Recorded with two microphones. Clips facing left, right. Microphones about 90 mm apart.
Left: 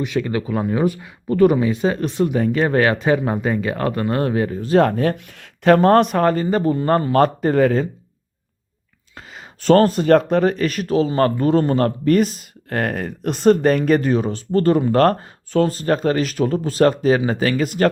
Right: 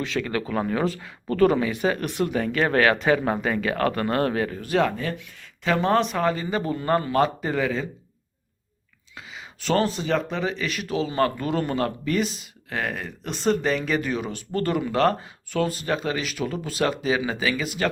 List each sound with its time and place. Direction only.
0.0 s speech: 20° left (ahead or behind)
4.8 s speech: 60° left (ahead or behind)
9.1 s speech: 40° left (ahead or behind)